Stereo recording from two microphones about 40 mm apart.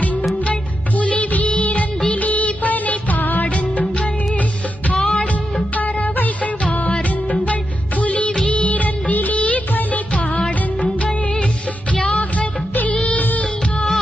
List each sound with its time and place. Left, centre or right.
0.5 s music of bollywood: left
2.1 s music: left
4.9 s music: centre
5.8 s music: left
8.0 s music of bollywood: left
11.9 s music: left
13.1 s music of bollywood: left